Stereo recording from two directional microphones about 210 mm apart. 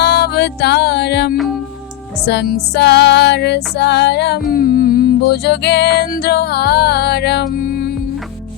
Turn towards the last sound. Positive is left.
turn(degrees=45)  # may be behind; listen again after turning